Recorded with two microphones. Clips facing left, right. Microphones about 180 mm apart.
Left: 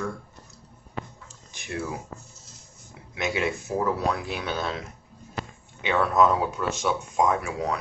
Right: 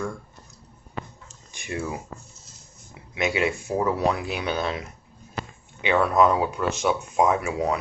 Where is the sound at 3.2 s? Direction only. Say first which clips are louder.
Right 3 dB; centre (ahead or behind).